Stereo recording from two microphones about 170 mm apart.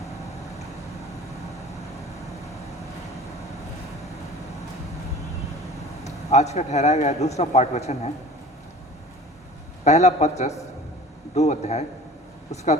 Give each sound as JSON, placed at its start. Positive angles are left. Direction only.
{"t": 6.1, "sound": "a man's voice", "side_deg": 40}
{"t": 9.8, "sound": "a man's voice", "side_deg": 40}